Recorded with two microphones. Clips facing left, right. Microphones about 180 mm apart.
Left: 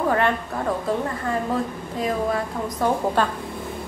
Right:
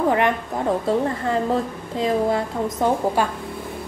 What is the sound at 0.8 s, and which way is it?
A woman's voice, 25° right (ahead or behind).